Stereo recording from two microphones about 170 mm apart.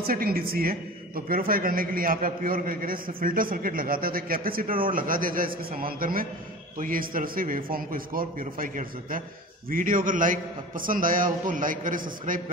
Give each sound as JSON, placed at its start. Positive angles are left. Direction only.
{"t": 0.0, "sound": "a man's voice", "side_deg": -60}